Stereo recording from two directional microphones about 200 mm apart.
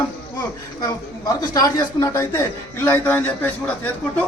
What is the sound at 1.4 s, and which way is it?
Speech, 15° left (ahead or behind).